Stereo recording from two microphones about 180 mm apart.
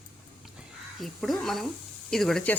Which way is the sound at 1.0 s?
Centre (ahead or behind).